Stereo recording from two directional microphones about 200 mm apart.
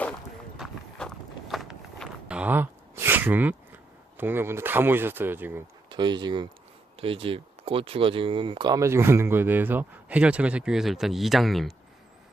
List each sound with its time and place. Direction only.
0.6 s walk: centre (ahead or behind)
4.2 s speech: 10° right (ahead or behind)
5.9 s speech: 20° right (ahead or behind); by 11.7 s centre (ahead or behind)